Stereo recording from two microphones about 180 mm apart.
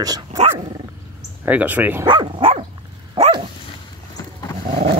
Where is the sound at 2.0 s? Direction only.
25° right (ahead or behind).